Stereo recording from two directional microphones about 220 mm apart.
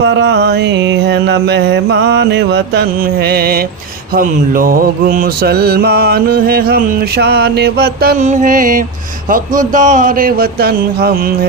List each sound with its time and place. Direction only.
0.0 s mantra: 50° right (ahead or behind)
9.3 s speech: 35° right (ahead or behind)